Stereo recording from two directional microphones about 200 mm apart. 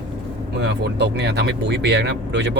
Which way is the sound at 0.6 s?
60° right (ahead or behind).